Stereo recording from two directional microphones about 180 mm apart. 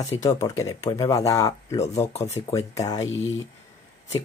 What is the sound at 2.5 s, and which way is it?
Speech, 20° left (ahead or behind).